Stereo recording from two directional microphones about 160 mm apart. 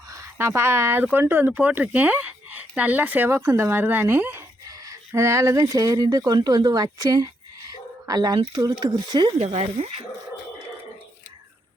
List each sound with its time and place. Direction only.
0.1 s speech: 15° right (ahead or behind)
7.7 s a sound: 25° right (ahead or behind)
8.8 s speech: 25° right (ahead or behind)
9.4 s speech: 40° right (ahead or behind)